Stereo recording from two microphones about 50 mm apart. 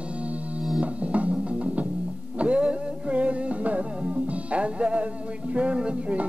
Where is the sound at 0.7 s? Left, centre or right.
Right.